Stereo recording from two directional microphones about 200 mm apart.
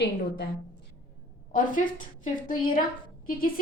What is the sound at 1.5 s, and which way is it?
Speech, 40° left (ahead or behind).